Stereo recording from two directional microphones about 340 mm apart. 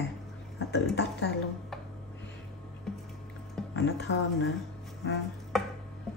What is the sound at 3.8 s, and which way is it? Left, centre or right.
Speech, left.